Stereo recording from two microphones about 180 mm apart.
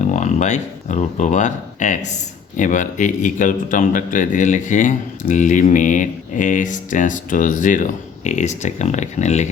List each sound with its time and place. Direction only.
0.0 s speech: 40° left (ahead or behind)